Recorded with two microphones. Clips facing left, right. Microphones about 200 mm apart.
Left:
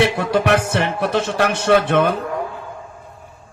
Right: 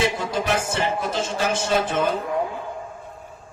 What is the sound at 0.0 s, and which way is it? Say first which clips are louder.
A man's voice: left 6 dB; 65° left (ahead or behind).